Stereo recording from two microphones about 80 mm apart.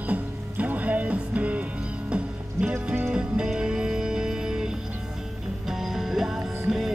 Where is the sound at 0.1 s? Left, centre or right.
Centre.